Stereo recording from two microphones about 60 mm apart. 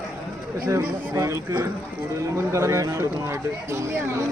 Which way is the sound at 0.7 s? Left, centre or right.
Right.